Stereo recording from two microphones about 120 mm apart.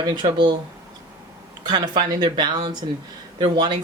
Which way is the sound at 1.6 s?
35° right (ahead or behind).